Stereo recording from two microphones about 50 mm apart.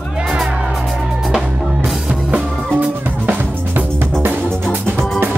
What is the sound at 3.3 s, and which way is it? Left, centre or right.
Music, right.